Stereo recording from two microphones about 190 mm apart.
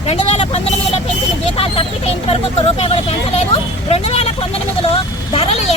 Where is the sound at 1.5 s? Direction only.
30° left (ahead or behind).